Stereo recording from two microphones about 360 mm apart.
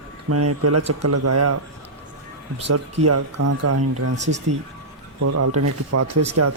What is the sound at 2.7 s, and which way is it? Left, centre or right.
Speech, right.